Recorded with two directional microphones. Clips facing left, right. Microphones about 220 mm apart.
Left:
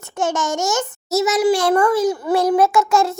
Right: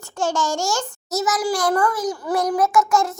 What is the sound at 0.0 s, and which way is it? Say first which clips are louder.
A child's voice: left 1 dB; 20° left (ahead or behind).